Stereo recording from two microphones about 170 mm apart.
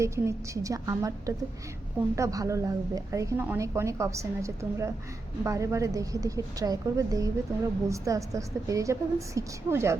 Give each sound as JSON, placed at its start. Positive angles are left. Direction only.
{"t": 0.0, "sound": "a woman's voice", "side_deg": -15}